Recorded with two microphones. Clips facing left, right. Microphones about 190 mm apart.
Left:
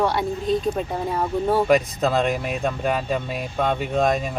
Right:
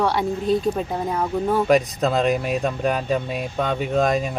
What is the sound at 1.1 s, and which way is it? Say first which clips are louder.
Speech: left 1 dB; centre (ahead or behind).